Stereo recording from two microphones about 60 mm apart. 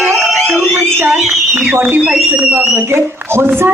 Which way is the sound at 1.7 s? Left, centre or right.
Right.